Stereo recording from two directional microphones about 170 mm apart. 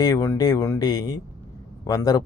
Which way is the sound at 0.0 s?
20° left (ahead or behind).